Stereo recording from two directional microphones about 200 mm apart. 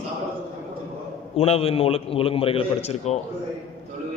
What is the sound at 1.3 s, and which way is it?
A man's voice, 30° left (ahead or behind).